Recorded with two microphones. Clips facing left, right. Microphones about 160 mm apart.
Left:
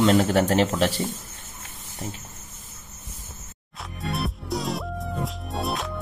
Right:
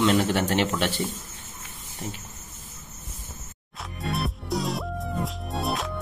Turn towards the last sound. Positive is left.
turn(degrees=0)  # may be behind; listen again after turning